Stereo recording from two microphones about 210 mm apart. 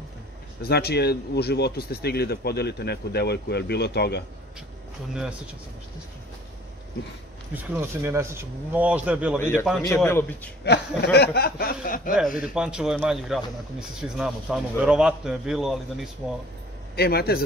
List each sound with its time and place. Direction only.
0.6 s speech: 50° left (ahead or behind)
7.5 s speech: 10° right (ahead or behind)
9.4 s a man's voice: 10° left (ahead or behind)
11.1 s speech: 50° left (ahead or behind)
12.5 s speech: 5° right (ahead or behind)
16.9 s speech: 50° left (ahead or behind)